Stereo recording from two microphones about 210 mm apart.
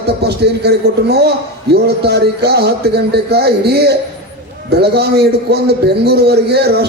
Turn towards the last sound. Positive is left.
turn(degrees=-50)  # may be behind; listen again after turning